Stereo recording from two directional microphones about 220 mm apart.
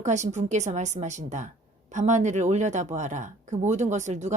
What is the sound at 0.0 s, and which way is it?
Speech, 30° right (ahead or behind).